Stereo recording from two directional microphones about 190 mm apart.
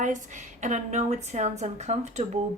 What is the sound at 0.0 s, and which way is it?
A woman's voice, 40° right (ahead or behind).